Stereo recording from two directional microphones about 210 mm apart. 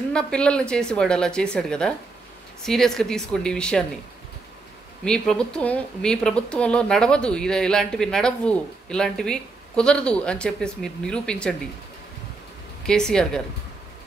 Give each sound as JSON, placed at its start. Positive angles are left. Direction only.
{"t": 0.1, "sound": "speech", "side_deg": 5}
{"t": 5.0, "sound": "speech", "side_deg": 5}
{"t": 12.8, "sound": "speech", "side_deg": 5}